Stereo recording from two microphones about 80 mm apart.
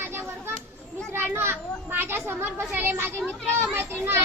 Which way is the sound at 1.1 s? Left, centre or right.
Right.